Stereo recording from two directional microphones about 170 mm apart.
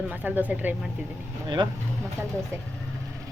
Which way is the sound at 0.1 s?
10° right (ahead or behind).